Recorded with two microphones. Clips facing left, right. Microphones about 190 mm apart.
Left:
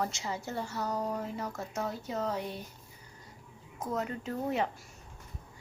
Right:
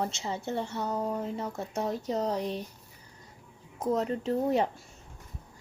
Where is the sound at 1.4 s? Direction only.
30° right (ahead or behind).